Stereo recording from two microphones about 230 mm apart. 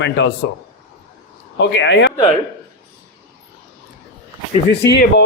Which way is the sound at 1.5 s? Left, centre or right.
Left.